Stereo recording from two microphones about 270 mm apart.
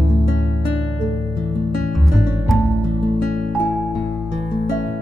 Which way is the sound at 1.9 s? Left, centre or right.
Centre.